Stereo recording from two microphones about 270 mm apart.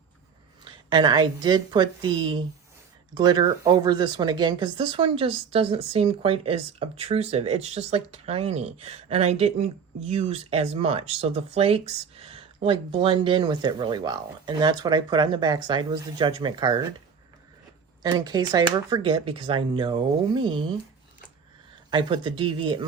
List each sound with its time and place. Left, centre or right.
0.6 s speech: centre
18.0 s speech: centre
21.8 s speech: centre